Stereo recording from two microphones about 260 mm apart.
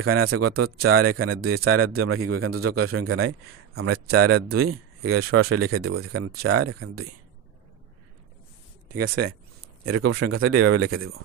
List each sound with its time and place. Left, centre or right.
0.0 s a man's voice: right
8.8 s speech: right
9.8 s a man's voice: right